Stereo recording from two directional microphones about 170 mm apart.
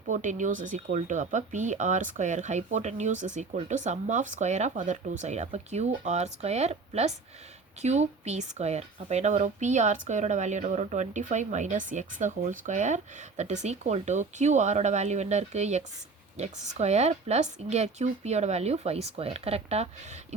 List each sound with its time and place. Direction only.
0.1 s speech: 45° right (ahead or behind)